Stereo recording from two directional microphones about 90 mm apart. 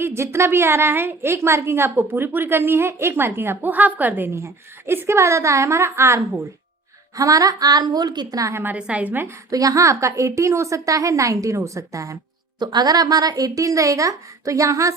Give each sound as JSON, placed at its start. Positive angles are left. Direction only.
{"t": 0.0, "sound": "a woman's voice", "side_deg": -30}
{"t": 7.2, "sound": "a woman's voice", "side_deg": -40}
{"t": 8.5, "sound": "a woman's voice", "side_deg": -20}
{"t": 9.2, "sound": "speech", "side_deg": -40}
{"t": 12.5, "sound": "speech", "side_deg": -50}